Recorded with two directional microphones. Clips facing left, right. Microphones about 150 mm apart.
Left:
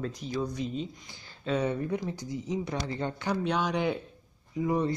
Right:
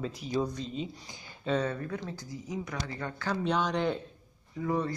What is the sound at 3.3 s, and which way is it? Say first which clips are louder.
Speech: even; 5° left (ahead or behind).